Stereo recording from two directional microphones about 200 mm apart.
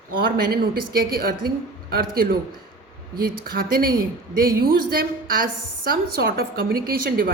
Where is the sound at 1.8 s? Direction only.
50° right (ahead or behind).